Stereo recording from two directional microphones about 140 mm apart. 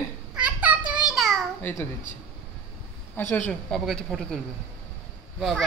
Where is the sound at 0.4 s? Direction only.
10° right (ahead or behind).